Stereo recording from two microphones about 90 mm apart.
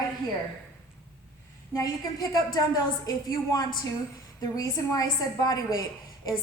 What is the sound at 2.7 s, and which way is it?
A woman's voice, 45° left (ahead or behind).